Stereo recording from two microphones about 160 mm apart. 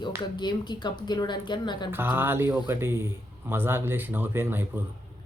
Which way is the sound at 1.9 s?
15° right (ahead or behind).